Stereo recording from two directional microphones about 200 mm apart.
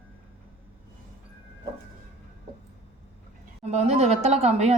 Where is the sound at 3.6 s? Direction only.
35° right (ahead or behind).